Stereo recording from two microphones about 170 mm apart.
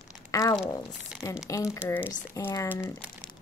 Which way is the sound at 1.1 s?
5° right (ahead or behind).